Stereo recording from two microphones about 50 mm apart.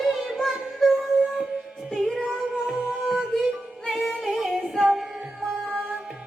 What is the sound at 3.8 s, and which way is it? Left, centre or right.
Female singing, centre.